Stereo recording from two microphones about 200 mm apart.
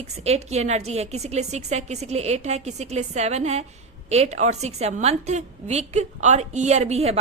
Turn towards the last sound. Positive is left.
turn(degrees=-30)  # may be behind; listen again after turning